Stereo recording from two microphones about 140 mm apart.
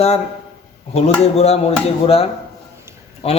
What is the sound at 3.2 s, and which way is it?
Speech, 45° left (ahead or behind).